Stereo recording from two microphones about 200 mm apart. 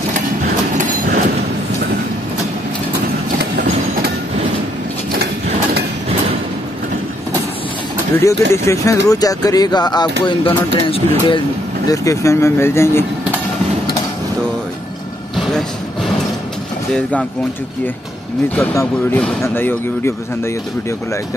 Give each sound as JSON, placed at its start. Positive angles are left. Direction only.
{"t": 0.5, "sound": "train", "side_deg": -45}
{"t": 8.2, "sound": "speech", "side_deg": 15}
{"t": 15.3, "sound": "train", "side_deg": 0}
{"t": 16.9, "sound": "speech", "side_deg": 5}
{"t": 18.6, "sound": "speech", "side_deg": 10}